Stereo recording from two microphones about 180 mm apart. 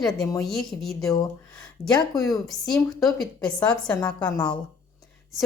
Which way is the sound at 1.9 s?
20° left (ahead or behind).